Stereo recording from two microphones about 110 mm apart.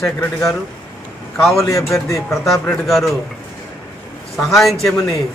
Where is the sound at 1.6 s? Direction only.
30° left (ahead or behind).